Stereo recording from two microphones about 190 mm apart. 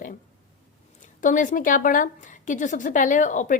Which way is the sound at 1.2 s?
40° left (ahead or behind).